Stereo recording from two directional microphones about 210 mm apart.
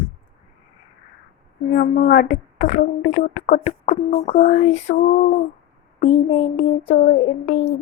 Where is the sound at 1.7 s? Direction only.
35° left (ahead or behind).